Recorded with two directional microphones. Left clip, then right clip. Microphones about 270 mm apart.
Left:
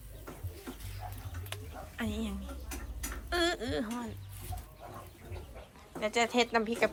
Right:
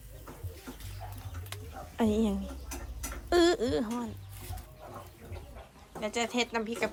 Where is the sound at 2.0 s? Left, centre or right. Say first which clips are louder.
Right 10 dB; centre.